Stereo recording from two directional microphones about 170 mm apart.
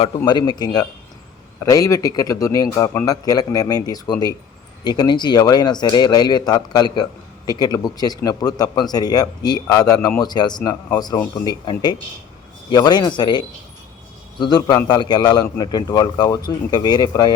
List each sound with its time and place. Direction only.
0.3 s a man's voice: 25° left (ahead or behind)